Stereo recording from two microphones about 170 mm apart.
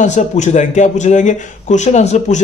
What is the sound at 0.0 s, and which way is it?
A man's voice, 45° left (ahead or behind).